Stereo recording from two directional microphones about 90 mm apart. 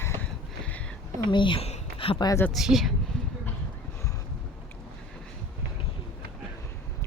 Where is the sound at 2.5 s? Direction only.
5° right (ahead or behind).